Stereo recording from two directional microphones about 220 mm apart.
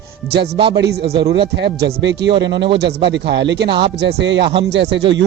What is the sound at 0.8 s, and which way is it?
Speech, 50° right (ahead or behind).